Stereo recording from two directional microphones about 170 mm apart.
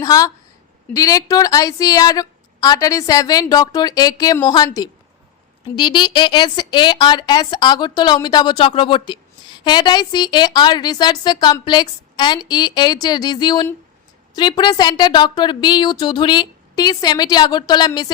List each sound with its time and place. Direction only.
0.0 s a woman's voice: 20° left (ahead or behind)